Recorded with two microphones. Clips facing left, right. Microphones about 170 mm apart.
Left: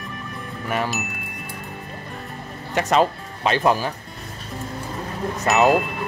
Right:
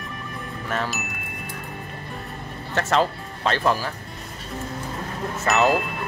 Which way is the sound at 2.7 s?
15° left (ahead or behind).